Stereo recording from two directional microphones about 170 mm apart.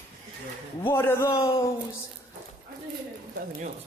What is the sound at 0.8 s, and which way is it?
Speech, 15° left (ahead or behind).